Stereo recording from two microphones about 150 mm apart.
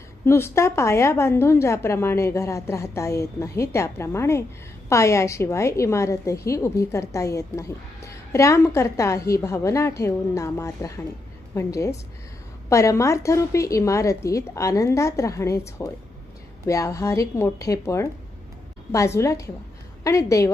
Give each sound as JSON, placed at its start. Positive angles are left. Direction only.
{"t": 0.3, "sound": "a woman's voice", "side_deg": 15}